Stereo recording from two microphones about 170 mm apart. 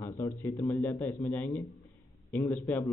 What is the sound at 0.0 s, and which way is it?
A man's voice, 15° left (ahead or behind).